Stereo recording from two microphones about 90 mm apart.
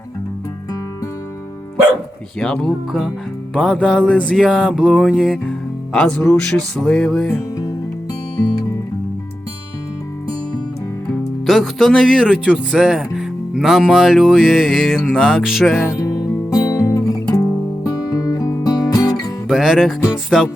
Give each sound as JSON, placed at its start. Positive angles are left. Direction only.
{"t": 2.4, "sound": "music", "side_deg": 10}
{"t": 3.8, "sound": "speech", "side_deg": -5}
{"t": 4.9, "sound": "music", "side_deg": 5}
{"t": 8.4, "sound": "music", "side_deg": 45}
{"t": 11.4, "sound": "speech", "side_deg": 5}
{"t": 16.0, "sound": "music", "side_deg": 40}
{"t": 19.1, "sound": "music", "side_deg": 0}
{"t": 20.3, "sound": "speech", "side_deg": -5}